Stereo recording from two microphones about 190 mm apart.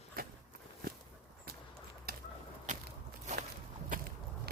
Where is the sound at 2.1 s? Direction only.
50° right (ahead or behind).